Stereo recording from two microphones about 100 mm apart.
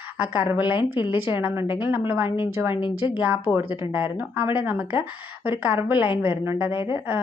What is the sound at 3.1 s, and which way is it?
Speech, 15° right (ahead or behind).